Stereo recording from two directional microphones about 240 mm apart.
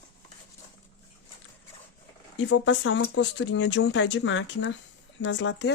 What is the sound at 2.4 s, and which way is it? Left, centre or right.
Speech, left.